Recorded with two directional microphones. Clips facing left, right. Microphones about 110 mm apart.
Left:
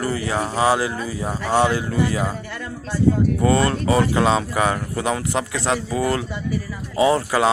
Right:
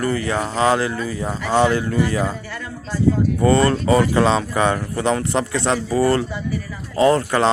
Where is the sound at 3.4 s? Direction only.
5° left (ahead or behind).